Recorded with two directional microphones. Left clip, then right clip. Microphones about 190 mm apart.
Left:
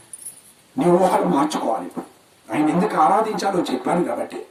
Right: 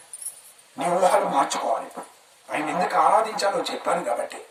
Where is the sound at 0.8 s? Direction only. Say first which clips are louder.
Left 3 dB; centre (ahead or behind).